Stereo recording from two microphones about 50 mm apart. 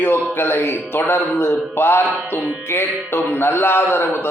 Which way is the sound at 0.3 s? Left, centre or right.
Left.